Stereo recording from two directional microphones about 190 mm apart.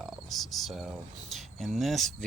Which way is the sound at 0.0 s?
Centre (ahead or behind).